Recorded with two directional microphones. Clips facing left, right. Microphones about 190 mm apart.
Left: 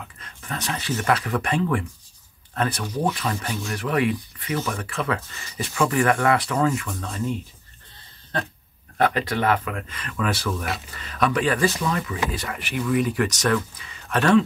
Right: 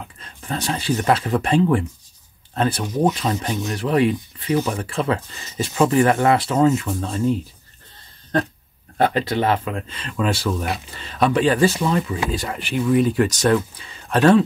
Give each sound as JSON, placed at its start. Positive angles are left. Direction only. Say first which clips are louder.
{"t": 0.2, "sound": "speech", "louder": "right 5 dB", "side_deg": -30}
{"t": 8.9, "sound": "speech", "louder": "right 3 dB", "side_deg": -30}